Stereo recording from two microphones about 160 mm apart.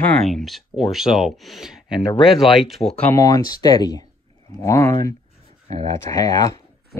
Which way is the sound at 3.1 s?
20° left (ahead or behind).